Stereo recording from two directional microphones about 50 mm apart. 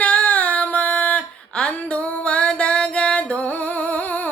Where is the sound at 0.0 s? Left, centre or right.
Left.